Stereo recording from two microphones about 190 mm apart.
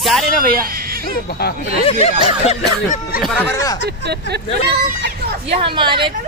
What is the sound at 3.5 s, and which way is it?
Speech, 15° left (ahead or behind).